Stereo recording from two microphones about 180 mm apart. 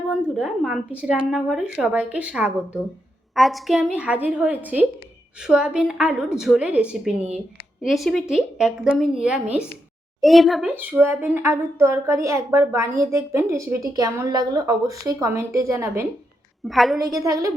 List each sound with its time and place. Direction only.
0.1 s a woman's voice: 5° right (ahead or behind)
16.6 s a woman's voice: centre (ahead or behind)
17.0 s a woman's voice: 20° right (ahead or behind)